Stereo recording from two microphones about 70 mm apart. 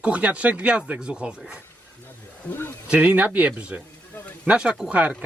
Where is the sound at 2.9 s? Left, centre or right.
Right.